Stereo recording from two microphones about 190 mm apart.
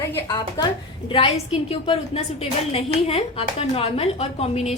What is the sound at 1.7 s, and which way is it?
A woman's voice, 30° left (ahead or behind).